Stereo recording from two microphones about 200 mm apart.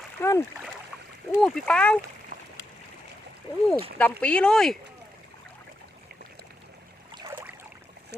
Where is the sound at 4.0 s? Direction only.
5° left (ahead or behind).